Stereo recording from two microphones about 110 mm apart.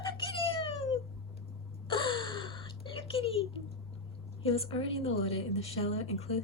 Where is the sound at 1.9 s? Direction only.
45° left (ahead or behind).